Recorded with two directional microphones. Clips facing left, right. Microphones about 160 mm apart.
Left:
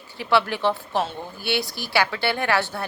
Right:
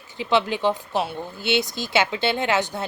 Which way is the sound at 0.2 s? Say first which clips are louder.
Even; 20° right (ahead or behind).